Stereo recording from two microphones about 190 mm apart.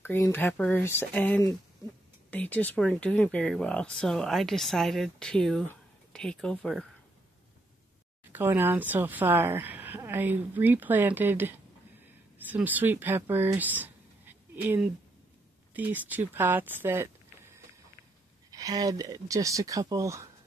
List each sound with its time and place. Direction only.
0.0 s speech: 10° left (ahead or behind)
8.3 s speech: 10° right (ahead or behind)
18.5 s speech: 20° right (ahead or behind)